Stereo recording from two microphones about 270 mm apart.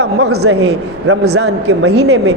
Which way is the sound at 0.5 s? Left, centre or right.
Right.